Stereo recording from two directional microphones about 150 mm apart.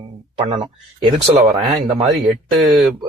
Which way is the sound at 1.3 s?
25° right (ahead or behind).